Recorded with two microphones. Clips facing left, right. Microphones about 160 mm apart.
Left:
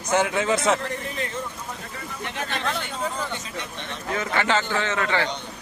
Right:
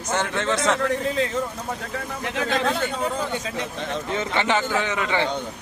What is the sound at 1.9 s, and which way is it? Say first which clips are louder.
Speech: right 4 dB; 90° right.